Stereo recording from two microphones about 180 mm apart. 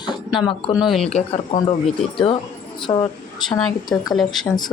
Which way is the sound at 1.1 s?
35° left (ahead or behind).